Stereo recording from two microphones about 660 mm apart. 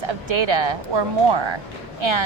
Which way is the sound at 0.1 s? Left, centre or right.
Right.